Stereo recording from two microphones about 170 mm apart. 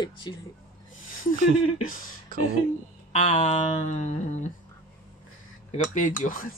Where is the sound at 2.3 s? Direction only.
55° right (ahead or behind).